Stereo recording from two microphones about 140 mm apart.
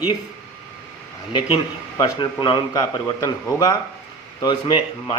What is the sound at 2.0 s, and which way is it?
A man's voice, 30° left (ahead or behind).